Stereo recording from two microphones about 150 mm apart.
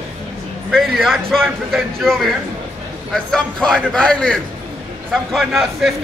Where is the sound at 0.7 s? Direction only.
Centre (ahead or behind).